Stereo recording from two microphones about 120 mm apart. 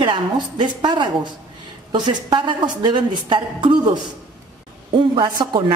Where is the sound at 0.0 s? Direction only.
40° right (ahead or behind).